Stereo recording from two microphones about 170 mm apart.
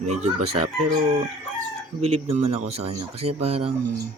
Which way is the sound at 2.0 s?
35° right (ahead or behind).